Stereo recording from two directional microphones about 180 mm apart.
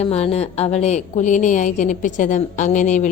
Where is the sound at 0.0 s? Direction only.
35° left (ahead or behind).